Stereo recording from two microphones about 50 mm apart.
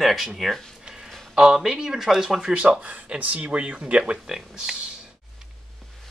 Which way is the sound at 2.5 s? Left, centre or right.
Right.